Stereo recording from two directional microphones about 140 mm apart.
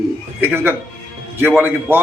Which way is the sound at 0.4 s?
15° right (ahead or behind).